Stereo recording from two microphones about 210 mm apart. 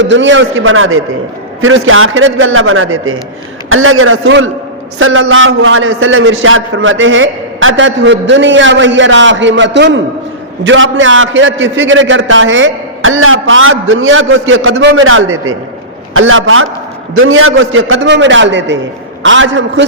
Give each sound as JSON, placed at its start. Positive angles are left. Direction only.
{"t": 0.0, "sound": "a man's voice", "side_deg": -60}